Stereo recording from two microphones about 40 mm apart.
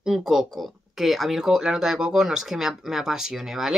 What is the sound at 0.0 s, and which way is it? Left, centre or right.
Speech, centre.